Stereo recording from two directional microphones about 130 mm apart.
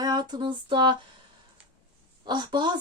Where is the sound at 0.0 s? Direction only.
35° right (ahead or behind).